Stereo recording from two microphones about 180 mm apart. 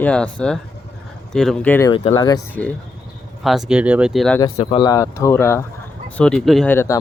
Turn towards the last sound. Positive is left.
turn(degrees=15)  # may be behind; listen again after turning